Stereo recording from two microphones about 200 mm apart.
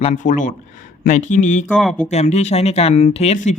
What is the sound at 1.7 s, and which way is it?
Speech, 5° left (ahead or behind).